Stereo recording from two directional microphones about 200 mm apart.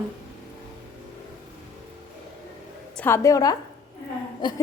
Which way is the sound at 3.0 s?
10° left (ahead or behind).